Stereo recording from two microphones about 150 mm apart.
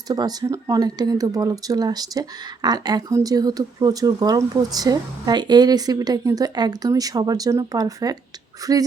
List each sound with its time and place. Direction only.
0.1 s speech: 25° right (ahead or behind)